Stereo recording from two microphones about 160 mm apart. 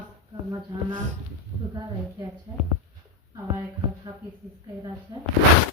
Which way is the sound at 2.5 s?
20° right (ahead or behind).